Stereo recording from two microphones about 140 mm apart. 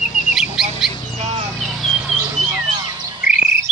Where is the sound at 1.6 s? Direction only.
Centre (ahead or behind).